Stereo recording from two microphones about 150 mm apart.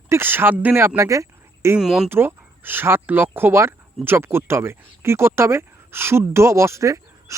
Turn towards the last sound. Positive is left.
turn(degrees=-20)  # may be behind; listen again after turning